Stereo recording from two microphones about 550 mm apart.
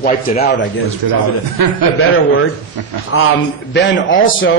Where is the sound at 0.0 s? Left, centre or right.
Centre.